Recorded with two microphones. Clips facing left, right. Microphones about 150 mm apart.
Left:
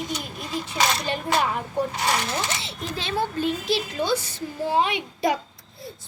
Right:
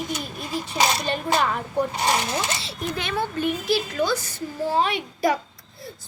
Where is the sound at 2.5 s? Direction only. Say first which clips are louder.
Right 2 dB; 20° left (ahead or behind).